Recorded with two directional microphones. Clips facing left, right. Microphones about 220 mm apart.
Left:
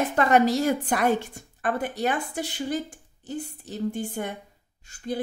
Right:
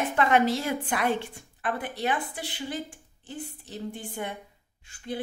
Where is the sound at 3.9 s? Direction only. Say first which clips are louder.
Left 5 dB; 45° left (ahead or behind).